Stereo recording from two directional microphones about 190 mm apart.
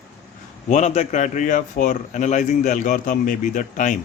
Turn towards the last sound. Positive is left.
turn(degrees=40)  # may be behind; listen again after turning